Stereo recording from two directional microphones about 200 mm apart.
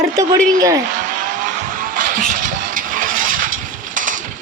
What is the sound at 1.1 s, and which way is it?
Vehicle, 40° right (ahead or behind).